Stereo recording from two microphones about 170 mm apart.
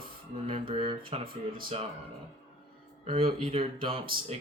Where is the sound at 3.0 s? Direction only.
30° right (ahead or behind).